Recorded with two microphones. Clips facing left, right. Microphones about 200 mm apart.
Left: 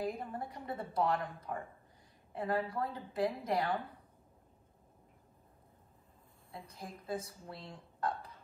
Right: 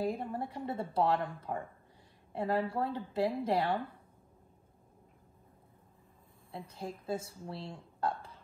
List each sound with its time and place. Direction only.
0.0 s speech: 30° right (ahead or behind)
6.5 s speech: 30° right (ahead or behind)